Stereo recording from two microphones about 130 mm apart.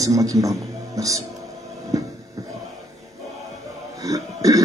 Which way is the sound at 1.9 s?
30° right (ahead or behind).